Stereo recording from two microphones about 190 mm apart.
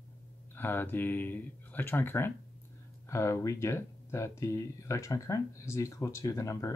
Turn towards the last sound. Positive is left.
turn(degrees=15)  # may be behind; listen again after turning